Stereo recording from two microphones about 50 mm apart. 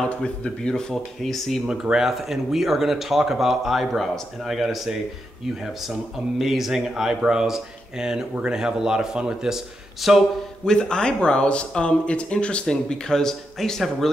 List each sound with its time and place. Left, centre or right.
0.2 s speech: centre
1.3 s speech: centre
1.7 s speech: centre
10.0 s speech: centre
10.6 s speech: centre